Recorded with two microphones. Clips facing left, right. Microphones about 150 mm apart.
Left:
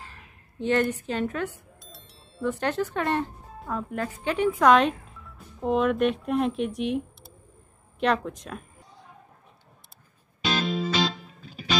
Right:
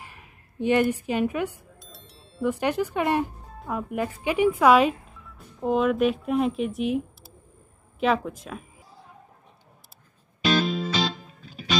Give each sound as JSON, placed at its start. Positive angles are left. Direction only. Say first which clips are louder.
{"t": 0.0, "sound": "speech", "louder": "even", "side_deg": -15}
{"t": 1.8, "sound": "music", "louder": "right 1 dB", "side_deg": 0}
{"t": 2.4, "sound": "a woman's voice", "louder": "right 2 dB", "side_deg": -10}
{"t": 10.4, "sound": "music", "louder": "right 3 dB", "side_deg": 0}